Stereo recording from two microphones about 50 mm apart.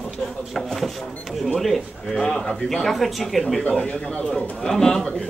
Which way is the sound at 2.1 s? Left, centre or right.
Centre.